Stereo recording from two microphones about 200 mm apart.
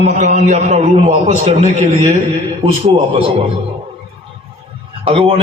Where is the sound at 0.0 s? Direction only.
35° right (ahead or behind).